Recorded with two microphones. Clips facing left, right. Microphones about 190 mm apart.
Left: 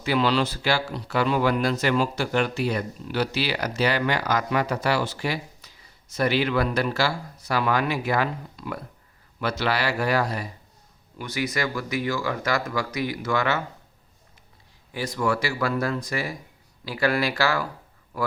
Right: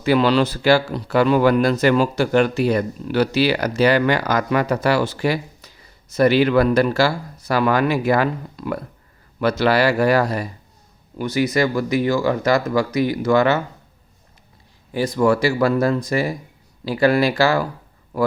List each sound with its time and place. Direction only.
0.0 s speech: 50° right (ahead or behind)
11.3 s speech: 25° right (ahead or behind)
14.9 s speech: 25° right (ahead or behind)